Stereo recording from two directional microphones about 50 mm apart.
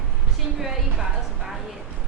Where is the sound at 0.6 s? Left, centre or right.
Centre.